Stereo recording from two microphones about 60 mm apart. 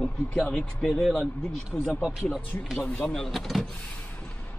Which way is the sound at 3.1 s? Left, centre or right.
Centre.